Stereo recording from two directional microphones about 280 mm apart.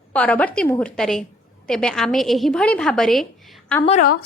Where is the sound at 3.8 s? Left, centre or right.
Left.